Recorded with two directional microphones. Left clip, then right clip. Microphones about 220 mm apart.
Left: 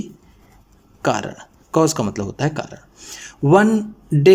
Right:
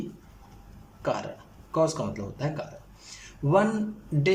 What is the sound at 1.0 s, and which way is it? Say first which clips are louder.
Speech: left 9 dB; 45° left (ahead or behind).